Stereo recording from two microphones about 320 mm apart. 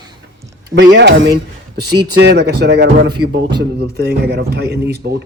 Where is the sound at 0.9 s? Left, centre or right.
Right.